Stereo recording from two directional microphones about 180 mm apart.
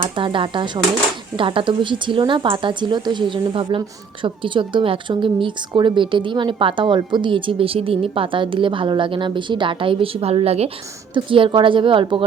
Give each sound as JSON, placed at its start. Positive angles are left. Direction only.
{"t": 0.0, "sound": "speech", "side_deg": -30}